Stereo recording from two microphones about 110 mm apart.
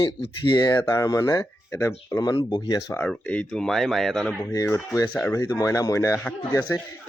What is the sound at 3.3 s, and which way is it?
Speech, 10° left (ahead or behind).